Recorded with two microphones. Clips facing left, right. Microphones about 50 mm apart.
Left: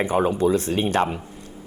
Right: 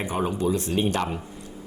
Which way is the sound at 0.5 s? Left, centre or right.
Left.